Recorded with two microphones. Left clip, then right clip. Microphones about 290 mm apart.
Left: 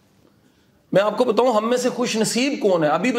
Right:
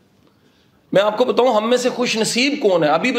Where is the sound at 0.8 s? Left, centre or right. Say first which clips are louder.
Right 2 dB; left.